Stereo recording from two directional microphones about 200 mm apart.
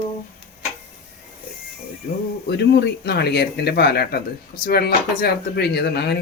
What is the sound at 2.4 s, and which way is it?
Speech, 60° left (ahead or behind).